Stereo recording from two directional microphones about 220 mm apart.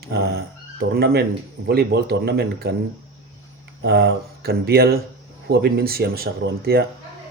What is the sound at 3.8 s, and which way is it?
Speech, 45° right (ahead or behind).